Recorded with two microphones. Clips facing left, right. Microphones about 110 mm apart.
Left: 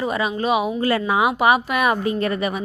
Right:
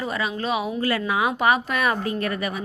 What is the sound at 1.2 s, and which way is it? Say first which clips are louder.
Speech: left 3 dB; 15° left (ahead or behind).